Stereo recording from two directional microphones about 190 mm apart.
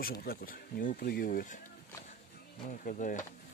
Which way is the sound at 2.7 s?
45° left (ahead or behind).